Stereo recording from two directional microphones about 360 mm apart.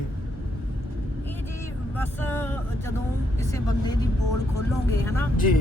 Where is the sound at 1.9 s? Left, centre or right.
Centre.